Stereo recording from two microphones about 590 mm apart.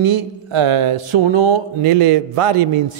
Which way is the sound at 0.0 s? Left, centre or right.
Right.